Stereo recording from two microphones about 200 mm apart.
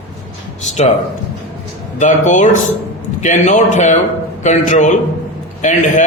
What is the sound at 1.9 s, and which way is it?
A man's voice, 40° left (ahead or behind).